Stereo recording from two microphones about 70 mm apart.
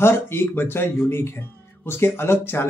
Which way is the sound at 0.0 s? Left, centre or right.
Left.